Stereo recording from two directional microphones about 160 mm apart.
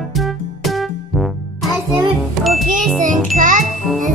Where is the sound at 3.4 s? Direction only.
55° right (ahead or behind).